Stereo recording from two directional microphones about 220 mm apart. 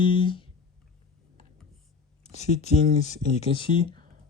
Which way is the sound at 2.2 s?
30° left (ahead or behind).